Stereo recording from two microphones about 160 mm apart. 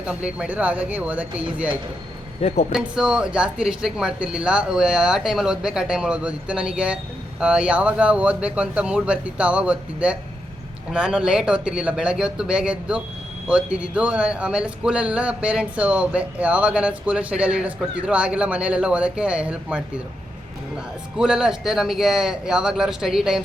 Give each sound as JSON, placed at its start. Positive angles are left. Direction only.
{"t": 0.0, "sound": "speech", "side_deg": -5}
{"t": 2.4, "sound": "speech", "side_deg": 40}
{"t": 2.7, "sound": "a man's voice", "side_deg": -5}
{"t": 21.2, "sound": "a man's voice", "side_deg": -5}